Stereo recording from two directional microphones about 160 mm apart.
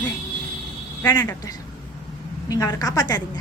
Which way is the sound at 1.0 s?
20° left (ahead or behind).